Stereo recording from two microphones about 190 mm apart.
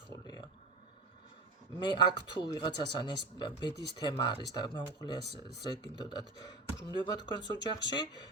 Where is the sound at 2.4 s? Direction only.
25° left (ahead or behind).